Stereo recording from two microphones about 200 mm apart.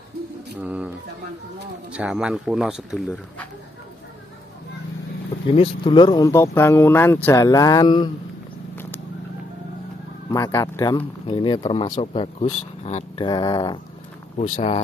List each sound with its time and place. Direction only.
0.6 s speech: 5° right (ahead or behind)
5.5 s speech: 25° left (ahead or behind)
10.3 s speech: 15° left (ahead or behind)